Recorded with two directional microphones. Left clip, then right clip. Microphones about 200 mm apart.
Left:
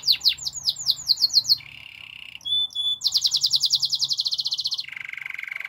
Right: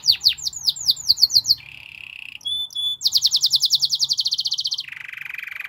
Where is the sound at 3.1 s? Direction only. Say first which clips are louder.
Right 5 dB; 15° right (ahead or behind).